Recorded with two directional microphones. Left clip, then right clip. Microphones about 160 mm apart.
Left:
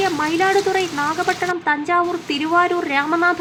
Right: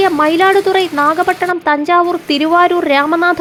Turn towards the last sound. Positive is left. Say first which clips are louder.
# right 6 dB
turn(degrees=-35)  # may be behind; listen again after turning